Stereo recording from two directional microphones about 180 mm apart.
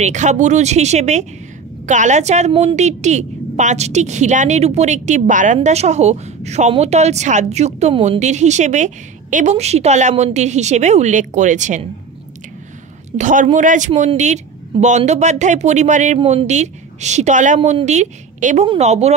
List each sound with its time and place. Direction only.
0.0 s a woman's voice: 40° right (ahead or behind)
13.2 s a woman's voice: 45° right (ahead or behind)